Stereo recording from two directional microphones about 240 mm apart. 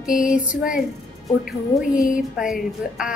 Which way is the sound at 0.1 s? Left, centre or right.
Centre.